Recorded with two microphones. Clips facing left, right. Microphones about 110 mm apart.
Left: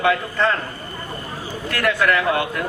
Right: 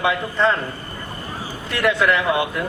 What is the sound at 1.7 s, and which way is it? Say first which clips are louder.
Speech: right 1 dB; 20° right (ahead or behind).